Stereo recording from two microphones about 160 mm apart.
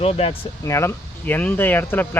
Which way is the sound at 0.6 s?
20° left (ahead or behind).